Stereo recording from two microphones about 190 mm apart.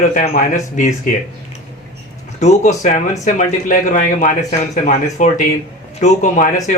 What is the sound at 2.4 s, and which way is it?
A man's voice, 35° left (ahead or behind).